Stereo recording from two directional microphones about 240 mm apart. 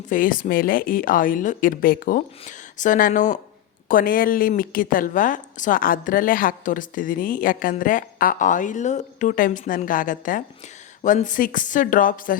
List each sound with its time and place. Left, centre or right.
0.1 s a woman's voice: left